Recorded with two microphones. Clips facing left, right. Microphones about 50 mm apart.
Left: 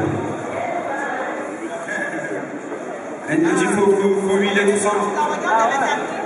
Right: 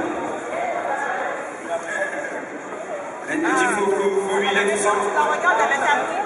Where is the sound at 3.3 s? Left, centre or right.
Centre.